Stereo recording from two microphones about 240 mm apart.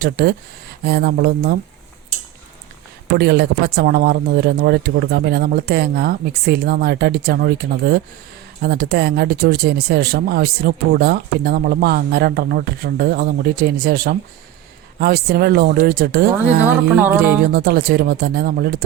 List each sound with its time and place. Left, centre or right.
0.0 s speech: right
3.2 s speech: right
16.9 s music: centre
17.5 s speech: right